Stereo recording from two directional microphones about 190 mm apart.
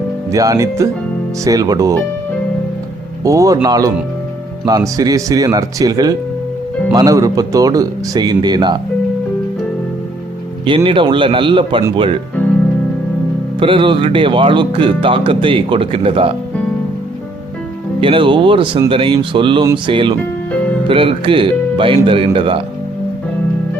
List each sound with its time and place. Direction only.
0.3 s speech: 20° right (ahead or behind)
3.2 s speech: 15° right (ahead or behind)
10.7 s speech: 25° right (ahead or behind)
13.6 s speech: 25° right (ahead or behind)
18.0 s speech: 25° right (ahead or behind)